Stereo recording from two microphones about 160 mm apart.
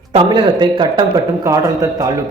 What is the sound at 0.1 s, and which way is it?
A man's voice, 30° right (ahead or behind).